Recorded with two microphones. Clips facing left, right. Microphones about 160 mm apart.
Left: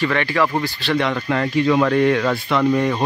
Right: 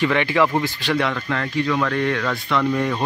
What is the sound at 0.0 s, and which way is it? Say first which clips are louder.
Speech: right 1 dB; 15° right (ahead or behind).